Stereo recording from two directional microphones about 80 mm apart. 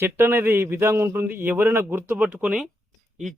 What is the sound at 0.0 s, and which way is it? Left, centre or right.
Speech, right.